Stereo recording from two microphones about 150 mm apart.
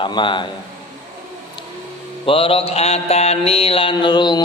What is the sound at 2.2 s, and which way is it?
A man's voice, 40° left (ahead or behind).